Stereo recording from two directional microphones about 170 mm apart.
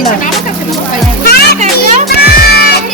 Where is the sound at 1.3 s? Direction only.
65° left (ahead or behind).